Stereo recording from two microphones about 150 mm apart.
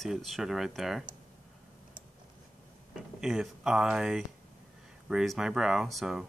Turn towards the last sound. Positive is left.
turn(degrees=0)  # may be behind; listen again after turning